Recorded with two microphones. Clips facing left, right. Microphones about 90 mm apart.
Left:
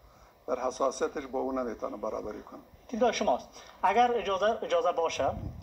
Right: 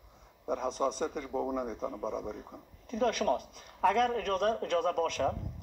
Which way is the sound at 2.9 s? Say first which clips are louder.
Left 3 dB; 50° left (ahead or behind).